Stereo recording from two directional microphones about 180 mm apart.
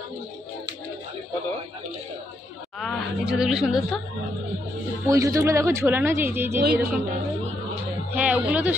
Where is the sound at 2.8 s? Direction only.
Centre (ahead or behind).